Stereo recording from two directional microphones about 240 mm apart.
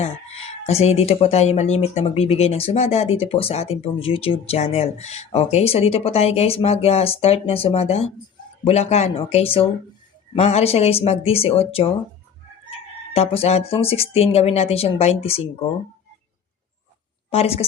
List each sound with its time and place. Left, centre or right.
0.0 s speech: left
13.1 s speech: left
17.3 s speech: left